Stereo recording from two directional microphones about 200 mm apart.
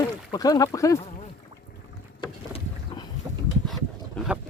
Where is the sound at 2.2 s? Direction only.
20° left (ahead or behind).